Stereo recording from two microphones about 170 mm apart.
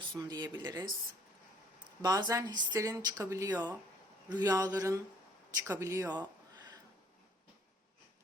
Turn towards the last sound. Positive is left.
turn(degrees=-25)  # may be behind; listen again after turning